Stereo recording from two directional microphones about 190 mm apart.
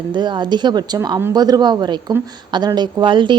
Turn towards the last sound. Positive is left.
turn(degrees=-25)  # may be behind; listen again after turning